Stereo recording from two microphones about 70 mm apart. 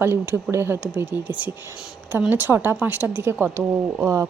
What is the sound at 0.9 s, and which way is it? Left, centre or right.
Speech, right.